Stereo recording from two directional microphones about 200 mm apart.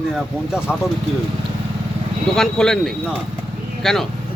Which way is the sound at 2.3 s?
5° left (ahead or behind).